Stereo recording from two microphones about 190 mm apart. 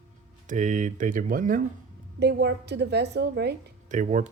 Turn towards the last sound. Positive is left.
turn(degrees=-45)  # may be behind; listen again after turning